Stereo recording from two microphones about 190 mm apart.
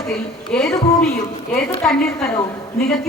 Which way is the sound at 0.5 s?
5° left (ahead or behind).